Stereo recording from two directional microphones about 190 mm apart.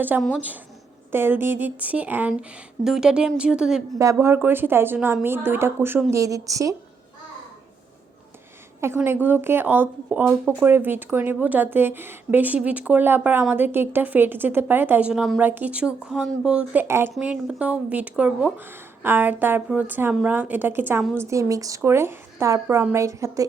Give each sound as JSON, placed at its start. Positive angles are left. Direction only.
{"t": 0.3, "sound": "speech", "side_deg": -10}
{"t": 3.9, "sound": "speech", "side_deg": -15}
{"t": 8.8, "sound": "speech", "side_deg": -10}